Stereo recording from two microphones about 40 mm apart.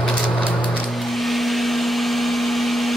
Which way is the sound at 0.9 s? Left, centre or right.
Centre.